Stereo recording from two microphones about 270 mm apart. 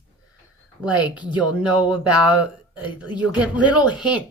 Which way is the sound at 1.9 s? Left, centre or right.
Centre.